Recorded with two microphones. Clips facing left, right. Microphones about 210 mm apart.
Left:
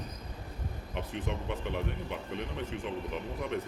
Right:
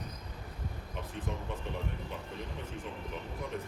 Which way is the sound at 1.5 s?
75° left (ahead or behind).